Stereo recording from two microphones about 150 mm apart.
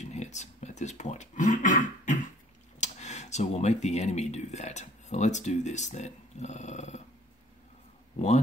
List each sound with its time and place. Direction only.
0.0 s throat clearing: 50° left (ahead or behind)
2.8 s speech: 50° left (ahead or behind)